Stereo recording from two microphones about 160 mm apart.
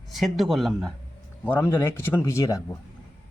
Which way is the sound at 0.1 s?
Centre (ahead or behind).